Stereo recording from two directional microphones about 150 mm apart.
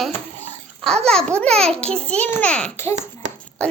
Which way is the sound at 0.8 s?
5° left (ahead or behind).